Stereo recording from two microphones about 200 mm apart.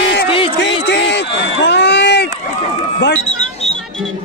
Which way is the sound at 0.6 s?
60° left (ahead or behind).